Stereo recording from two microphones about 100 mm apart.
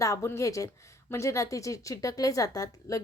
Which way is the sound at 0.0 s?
30° left (ahead or behind).